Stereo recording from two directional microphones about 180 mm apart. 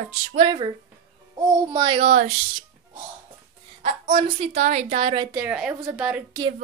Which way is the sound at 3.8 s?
30° right (ahead or behind).